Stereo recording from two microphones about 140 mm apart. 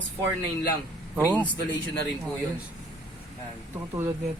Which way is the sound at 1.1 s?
10° right (ahead or behind).